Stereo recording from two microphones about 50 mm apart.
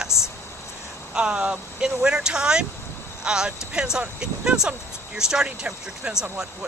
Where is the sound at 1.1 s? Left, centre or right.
Centre.